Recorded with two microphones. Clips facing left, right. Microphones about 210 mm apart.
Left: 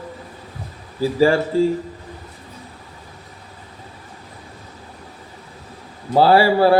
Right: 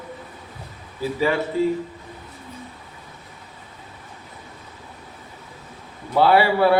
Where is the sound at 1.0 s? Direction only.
30° left (ahead or behind).